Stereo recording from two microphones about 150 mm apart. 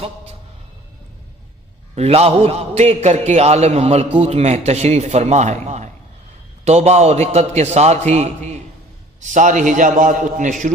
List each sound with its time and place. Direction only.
2.0 s a man's voice: 45° right (ahead or behind); by 10.5 s 60° right (ahead or behind)